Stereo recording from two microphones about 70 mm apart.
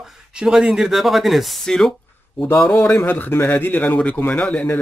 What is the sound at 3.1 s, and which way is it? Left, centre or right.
Speech, left.